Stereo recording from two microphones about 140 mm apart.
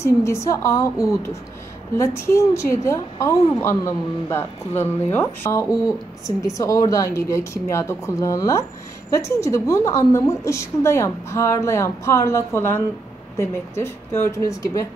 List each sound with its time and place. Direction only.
0.0 s a woman's voice: 20° left (ahead or behind)